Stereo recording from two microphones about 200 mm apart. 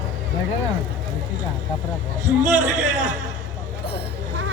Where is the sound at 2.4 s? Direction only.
35° right (ahead or behind).